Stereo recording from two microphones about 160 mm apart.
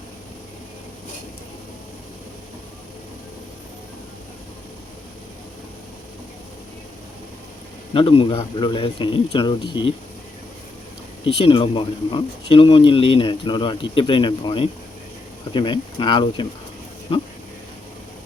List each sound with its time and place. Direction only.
7.9 s speech: 35° left (ahead or behind)
11.2 s speech: 35° left (ahead or behind)